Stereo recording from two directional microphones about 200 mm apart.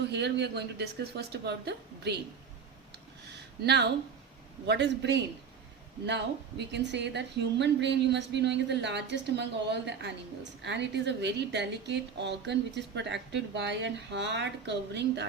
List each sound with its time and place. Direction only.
0.0 s a woman's voice: 60° right (ahead or behind)
3.6 s a woman's voice: 55° right (ahead or behind)